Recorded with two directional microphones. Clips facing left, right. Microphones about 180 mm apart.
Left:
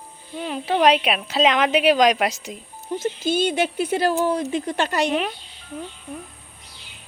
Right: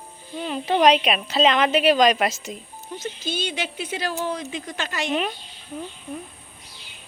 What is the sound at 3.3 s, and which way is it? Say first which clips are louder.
Speech: left 8 dB; 50° left (ahead or behind).